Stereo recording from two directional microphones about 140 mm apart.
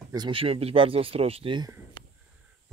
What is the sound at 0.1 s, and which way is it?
Speech, 35° right (ahead or behind).